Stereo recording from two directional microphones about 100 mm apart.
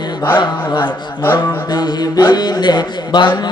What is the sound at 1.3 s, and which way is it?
Mantra, 45° left (ahead or behind).